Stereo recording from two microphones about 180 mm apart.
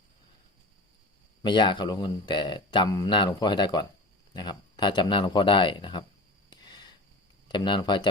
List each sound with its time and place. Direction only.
1.4 s speech: 25° left (ahead or behind)
6.6 s a sound: 25° left (ahead or behind)
7.4 s speech: 25° left (ahead or behind)